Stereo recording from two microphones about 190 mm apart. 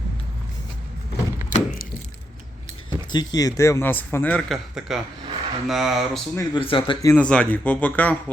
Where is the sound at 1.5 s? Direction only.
40° left (ahead or behind).